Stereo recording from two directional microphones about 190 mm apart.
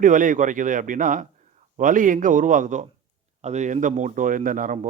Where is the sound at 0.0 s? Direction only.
45° right (ahead or behind).